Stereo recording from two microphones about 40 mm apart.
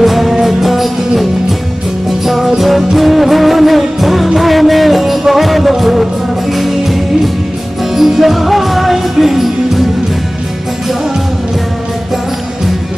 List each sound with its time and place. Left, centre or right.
0.0 s music: centre